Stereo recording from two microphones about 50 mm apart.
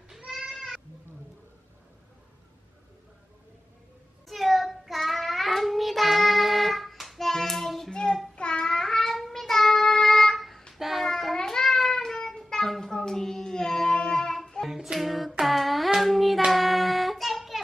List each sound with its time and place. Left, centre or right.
0.3 s goat: centre
4.3 s child singing: centre
7.9 s child singing: centre
15.4 s a sound: centre
16.4 s child singing: centre